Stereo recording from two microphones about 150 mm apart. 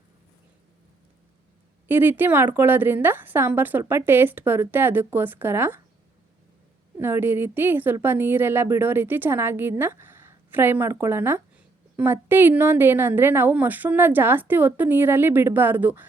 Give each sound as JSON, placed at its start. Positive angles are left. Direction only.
{"t": 1.9, "sound": "a woman's voice", "side_deg": -15}
{"t": 7.0, "sound": "a woman's voice", "side_deg": -15}